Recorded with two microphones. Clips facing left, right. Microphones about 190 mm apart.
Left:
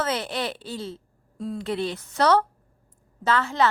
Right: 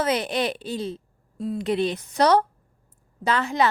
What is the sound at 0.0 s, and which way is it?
A woman's voice, 15° right (ahead or behind).